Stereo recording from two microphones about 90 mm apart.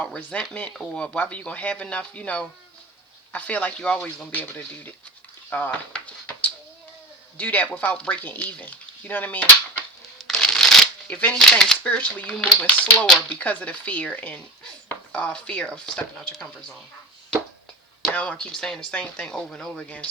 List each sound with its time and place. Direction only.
0.0 s speech: 15° left (ahead or behind)
1.0 s speech: 15° left (ahead or behind)
5.9 s a sound: 15° left (ahead or behind)
7.3 s speech: 20° left (ahead or behind)
10.2 s a sound: 5° left (ahead or behind)
11.1 s speech: 15° left (ahead or behind)
11.3 s speech: 5° left (ahead or behind)
11.8 s speech: 15° left (ahead or behind)
18.1 s speech: 15° left (ahead or behind)